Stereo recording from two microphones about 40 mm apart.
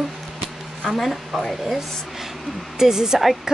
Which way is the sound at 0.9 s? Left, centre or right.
Centre.